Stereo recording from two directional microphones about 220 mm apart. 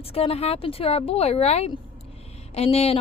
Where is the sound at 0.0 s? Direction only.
25° left (ahead or behind).